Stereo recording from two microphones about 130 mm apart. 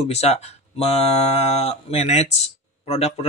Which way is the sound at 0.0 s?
55° left (ahead or behind).